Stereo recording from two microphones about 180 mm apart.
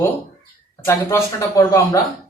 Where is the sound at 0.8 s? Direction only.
15° left (ahead or behind).